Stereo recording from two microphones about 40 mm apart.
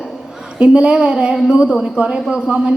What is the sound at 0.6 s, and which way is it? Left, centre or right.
Speech, right.